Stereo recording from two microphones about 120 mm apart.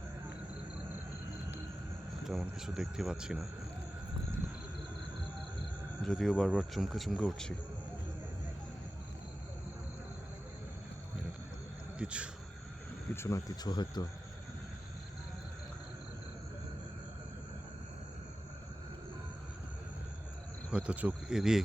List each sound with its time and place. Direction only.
2.2 s speech: 5° right (ahead or behind)
6.1 s speech: 5° left (ahead or behind)
11.9 s speech: 10° right (ahead or behind)
13.1 s speech: 25° left (ahead or behind)
13.7 s speech: 35° left (ahead or behind)
20.7 s speech: 10° right (ahead or behind)